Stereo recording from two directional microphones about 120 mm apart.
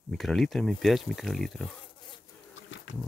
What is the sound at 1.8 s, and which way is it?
Bee, 40° left (ahead or behind).